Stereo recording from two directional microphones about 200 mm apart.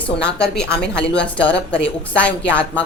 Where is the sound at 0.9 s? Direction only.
60° left (ahead or behind).